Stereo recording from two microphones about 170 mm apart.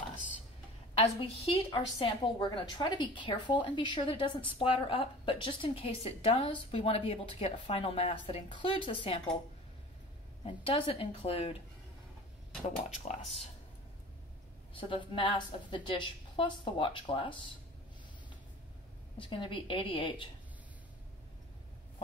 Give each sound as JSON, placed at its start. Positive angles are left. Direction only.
{"t": 0.9, "sound": "a woman's voice", "side_deg": 35}
{"t": 10.4, "sound": "a woman's voice", "side_deg": 35}
{"t": 12.6, "sound": "speech", "side_deg": 40}
{"t": 14.7, "sound": "a woman's voice", "side_deg": 30}
{"t": 19.1, "sound": "a woman's voice", "side_deg": 30}